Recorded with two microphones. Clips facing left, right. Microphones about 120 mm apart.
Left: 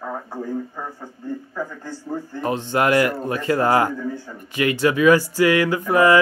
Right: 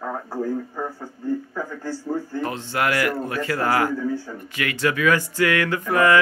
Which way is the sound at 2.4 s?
20° left (ahead or behind).